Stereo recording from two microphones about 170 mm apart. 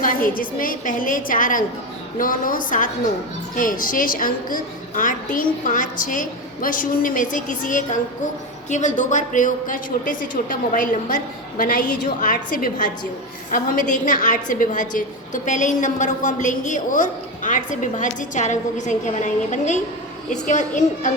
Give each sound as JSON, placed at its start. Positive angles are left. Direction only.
{"t": 0.0, "sound": "a woman's voice", "side_deg": 55}